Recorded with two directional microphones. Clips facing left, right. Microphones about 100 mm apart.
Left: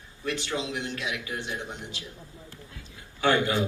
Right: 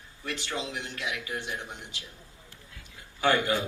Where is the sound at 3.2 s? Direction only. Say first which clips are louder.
Left 2 dB; 20° left (ahead or behind).